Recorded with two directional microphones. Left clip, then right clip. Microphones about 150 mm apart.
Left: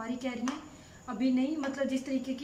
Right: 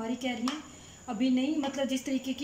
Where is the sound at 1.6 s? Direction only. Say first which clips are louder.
Right 1 dB; 20° right (ahead or behind).